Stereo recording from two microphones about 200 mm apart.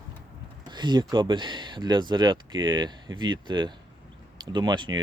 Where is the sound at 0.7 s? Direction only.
20° right (ahead or behind).